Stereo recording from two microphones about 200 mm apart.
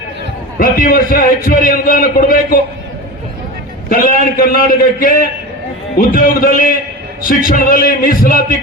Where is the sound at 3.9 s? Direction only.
45° left (ahead or behind).